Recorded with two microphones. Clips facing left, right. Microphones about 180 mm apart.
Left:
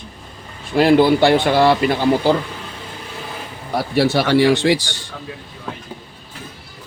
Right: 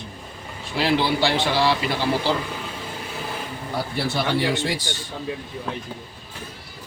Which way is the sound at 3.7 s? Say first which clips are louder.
Left 9 dB; 80° left.